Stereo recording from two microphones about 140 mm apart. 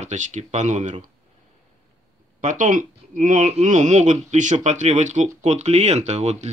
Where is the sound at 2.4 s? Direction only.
65° right (ahead or behind).